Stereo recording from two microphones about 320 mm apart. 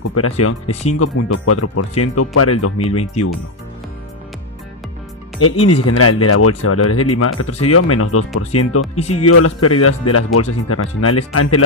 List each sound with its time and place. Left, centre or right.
0.1 s speech: left
5.4 s speech: left